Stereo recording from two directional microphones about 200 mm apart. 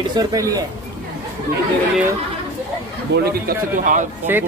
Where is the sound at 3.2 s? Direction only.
45° right (ahead or behind).